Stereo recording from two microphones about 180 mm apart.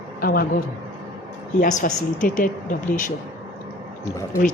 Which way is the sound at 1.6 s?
45° left (ahead or behind).